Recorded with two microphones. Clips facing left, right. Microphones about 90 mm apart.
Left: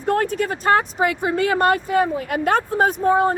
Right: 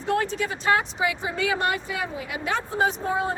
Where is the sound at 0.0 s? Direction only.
50° left (ahead or behind).